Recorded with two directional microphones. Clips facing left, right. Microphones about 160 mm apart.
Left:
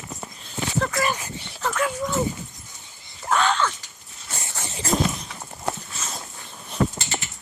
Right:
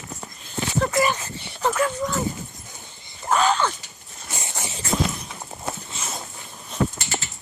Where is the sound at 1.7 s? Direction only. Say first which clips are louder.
Left 1 dB; 5° left (ahead or behind).